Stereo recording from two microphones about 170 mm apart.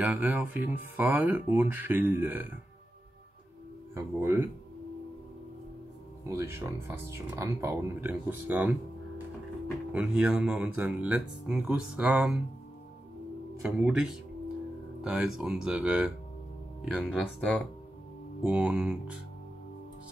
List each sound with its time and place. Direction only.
0.0 s speech: 10° right (ahead or behind)
3.9 s speech: 15° right (ahead or behind)
6.2 s speech: 15° right (ahead or behind)
9.9 s speech: 5° right (ahead or behind)
13.6 s speech: 5° right (ahead or behind)
18.4 s speech: 5° right (ahead or behind)